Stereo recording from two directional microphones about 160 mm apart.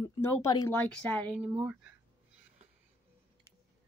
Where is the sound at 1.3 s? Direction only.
10° right (ahead or behind).